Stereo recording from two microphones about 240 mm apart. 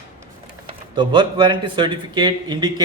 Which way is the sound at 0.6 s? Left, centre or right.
Centre.